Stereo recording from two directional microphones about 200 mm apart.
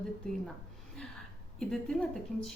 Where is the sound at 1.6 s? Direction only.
Centre (ahead or behind).